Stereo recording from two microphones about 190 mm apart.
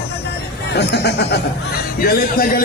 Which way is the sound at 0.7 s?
60° left (ahead or behind).